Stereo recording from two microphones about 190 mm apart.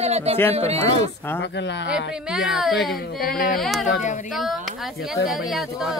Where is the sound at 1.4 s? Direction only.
65° left (ahead or behind).